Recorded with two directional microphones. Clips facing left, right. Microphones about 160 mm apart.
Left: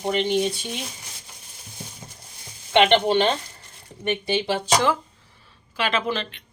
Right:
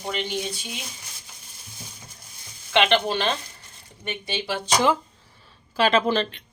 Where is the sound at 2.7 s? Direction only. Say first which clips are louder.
Left 4 dB; 25° left (ahead or behind).